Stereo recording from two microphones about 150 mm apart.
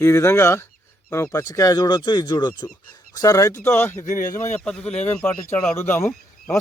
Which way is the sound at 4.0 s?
60° left (ahead or behind).